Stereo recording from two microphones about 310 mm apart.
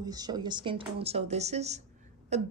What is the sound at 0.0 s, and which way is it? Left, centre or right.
Speech, centre.